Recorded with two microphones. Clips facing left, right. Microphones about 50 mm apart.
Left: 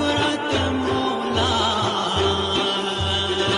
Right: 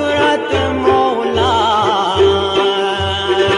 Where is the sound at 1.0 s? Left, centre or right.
Right.